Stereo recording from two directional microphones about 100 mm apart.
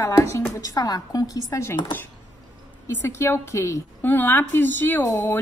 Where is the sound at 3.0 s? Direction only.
25° left (ahead or behind).